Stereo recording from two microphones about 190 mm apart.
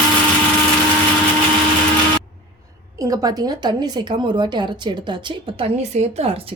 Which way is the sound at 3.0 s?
20° right (ahead or behind).